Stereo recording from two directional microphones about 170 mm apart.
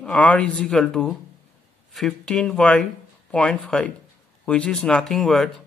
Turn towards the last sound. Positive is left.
turn(degrees=0)  # may be behind; listen again after turning